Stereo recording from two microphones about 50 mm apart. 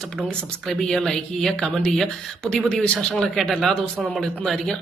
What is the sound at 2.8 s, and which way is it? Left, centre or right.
Speech, left.